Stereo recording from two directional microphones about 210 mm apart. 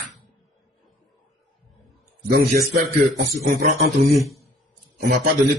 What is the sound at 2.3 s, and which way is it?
A man's voice, 45° right (ahead or behind).